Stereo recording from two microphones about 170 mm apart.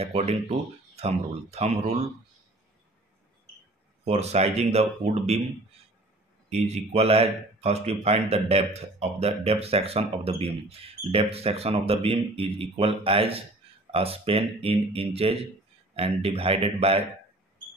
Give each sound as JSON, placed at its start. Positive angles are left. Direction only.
{"t": 0.0, "sound": "speech", "side_deg": -35}
{"t": 4.0, "sound": "speech", "side_deg": -40}
{"t": 6.5, "sound": "speech", "side_deg": -35}